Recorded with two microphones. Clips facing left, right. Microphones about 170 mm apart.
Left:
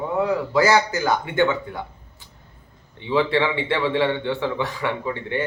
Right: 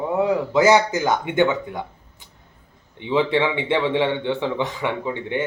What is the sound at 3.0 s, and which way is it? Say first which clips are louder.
A man's voice: right 1 dB; 20° right (ahead or behind).